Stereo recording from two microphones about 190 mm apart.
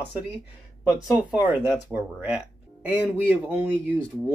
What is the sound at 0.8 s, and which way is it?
Speech, centre (ahead or behind).